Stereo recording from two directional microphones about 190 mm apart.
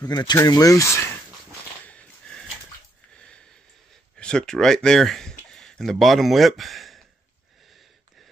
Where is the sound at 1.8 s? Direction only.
5° left (ahead or behind).